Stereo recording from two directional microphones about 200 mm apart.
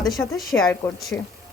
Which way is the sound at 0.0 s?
Centre (ahead or behind).